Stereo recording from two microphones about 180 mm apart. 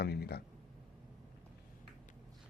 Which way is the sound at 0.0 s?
60° left (ahead or behind).